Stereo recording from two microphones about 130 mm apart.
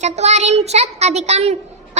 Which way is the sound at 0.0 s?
60° right (ahead or behind).